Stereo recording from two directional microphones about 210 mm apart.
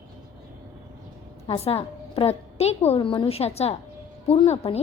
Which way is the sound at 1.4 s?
25° left (ahead or behind).